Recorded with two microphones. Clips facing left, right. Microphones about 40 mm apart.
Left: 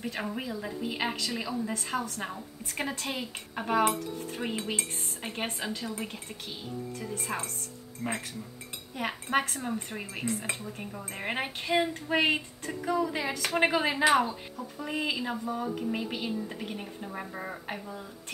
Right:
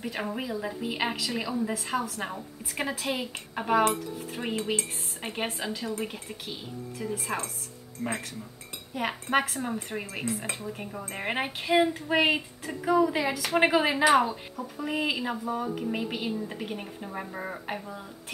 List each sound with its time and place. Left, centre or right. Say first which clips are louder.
0.0 s speech: right 2 dB; centre